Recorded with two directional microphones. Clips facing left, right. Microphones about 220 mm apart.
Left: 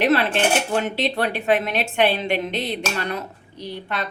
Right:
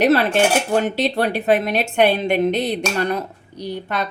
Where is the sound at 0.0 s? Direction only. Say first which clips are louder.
Right 4 dB; 40° right (ahead or behind).